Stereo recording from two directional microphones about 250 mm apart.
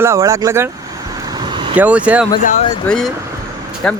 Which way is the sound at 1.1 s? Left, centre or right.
Centre.